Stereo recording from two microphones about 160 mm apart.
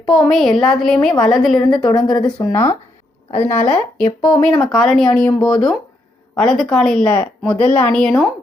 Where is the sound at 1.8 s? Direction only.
30° left (ahead or behind).